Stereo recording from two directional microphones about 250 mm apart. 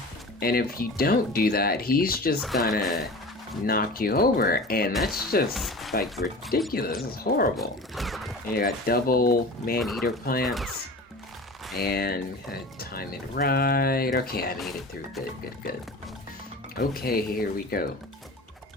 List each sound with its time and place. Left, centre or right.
0.3 s speech: left
2.4 s speech: centre
3.7 s speech: left
5.5 s speech: centre
6.2 s speech: left
7.6 s speech: centre
8.5 s speech: left
9.8 s speech: centre
11.8 s speech: left
14.6 s speech: centre
16.7 s speech: left